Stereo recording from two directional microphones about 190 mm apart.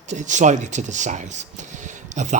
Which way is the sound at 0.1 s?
40° right (ahead or behind).